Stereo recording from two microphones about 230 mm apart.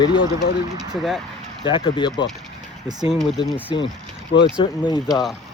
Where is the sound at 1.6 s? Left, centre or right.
Left.